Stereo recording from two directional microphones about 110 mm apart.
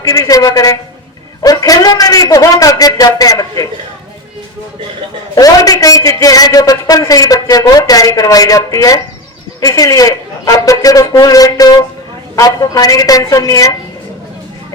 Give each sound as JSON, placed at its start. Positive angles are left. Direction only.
{"t": 0.0, "sound": "a man's voice", "side_deg": 30}
{"t": 5.3, "sound": "a man's voice", "side_deg": 35}